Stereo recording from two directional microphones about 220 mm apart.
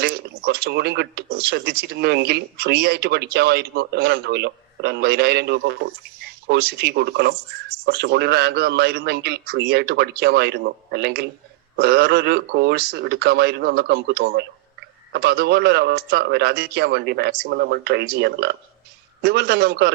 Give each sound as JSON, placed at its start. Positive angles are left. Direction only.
{"t": 0.0, "sound": "speech", "side_deg": -45}